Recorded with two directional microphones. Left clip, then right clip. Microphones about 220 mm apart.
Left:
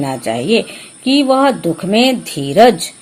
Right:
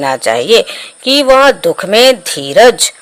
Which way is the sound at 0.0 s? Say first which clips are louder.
Right 7 dB; 40° right (ahead or behind).